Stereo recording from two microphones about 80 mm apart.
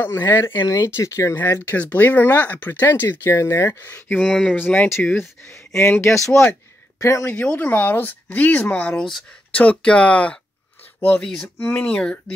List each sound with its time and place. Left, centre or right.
0.0 s speech: left
1.3 s speech: left
4.1 s speech: centre
4.6 s speech: centre
5.1 s speech: left
7.2 s speech: centre